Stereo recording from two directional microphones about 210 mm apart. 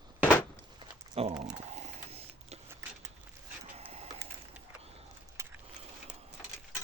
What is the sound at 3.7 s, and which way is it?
Printer, 30° right (ahead or behind).